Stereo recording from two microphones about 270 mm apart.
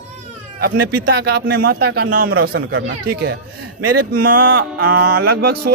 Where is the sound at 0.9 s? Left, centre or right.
Right.